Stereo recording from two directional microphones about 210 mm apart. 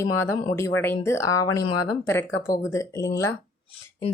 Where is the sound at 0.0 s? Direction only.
10° left (ahead or behind).